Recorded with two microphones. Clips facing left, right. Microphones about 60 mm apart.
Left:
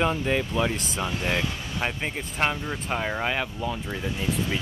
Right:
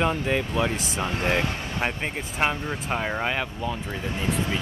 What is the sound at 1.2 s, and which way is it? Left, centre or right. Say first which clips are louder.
Speech: right 4 dB; right.